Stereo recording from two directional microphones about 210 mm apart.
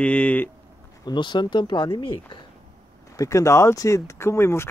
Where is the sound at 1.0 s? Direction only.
20° left (ahead or behind).